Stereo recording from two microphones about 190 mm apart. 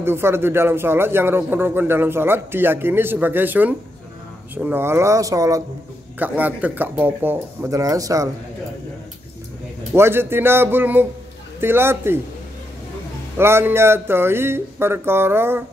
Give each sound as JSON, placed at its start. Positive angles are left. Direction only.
{"t": 0.0, "sound": "a man's voice", "side_deg": -10}
{"t": 9.9, "sound": "a man's voice", "side_deg": -10}
{"t": 13.4, "sound": "a man's voice", "side_deg": -10}